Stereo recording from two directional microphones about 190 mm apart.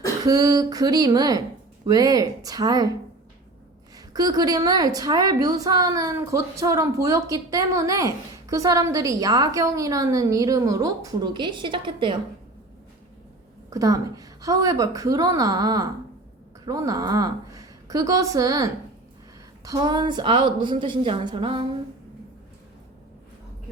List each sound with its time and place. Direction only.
0.3 s a woman's voice: 20° right (ahead or behind)
3.9 s a woman's voice: 20° right (ahead or behind)
13.7 s a woman's voice: 20° right (ahead or behind)